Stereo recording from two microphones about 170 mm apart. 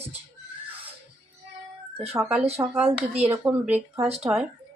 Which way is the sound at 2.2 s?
5° right (ahead or behind).